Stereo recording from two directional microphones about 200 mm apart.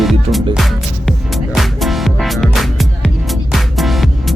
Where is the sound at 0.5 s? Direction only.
Centre (ahead or behind).